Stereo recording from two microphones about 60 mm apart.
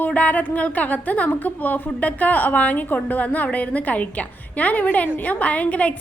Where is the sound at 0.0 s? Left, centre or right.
Left.